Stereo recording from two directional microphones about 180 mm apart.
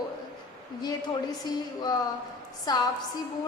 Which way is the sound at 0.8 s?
20° left (ahead or behind).